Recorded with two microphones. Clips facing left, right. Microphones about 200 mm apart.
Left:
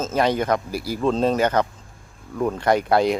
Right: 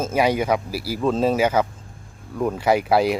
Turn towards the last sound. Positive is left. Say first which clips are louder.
# even
turn(degrees=-5)  # may be behind; listen again after turning